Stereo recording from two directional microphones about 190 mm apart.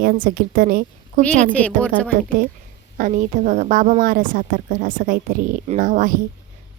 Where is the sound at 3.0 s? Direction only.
40° right (ahead or behind).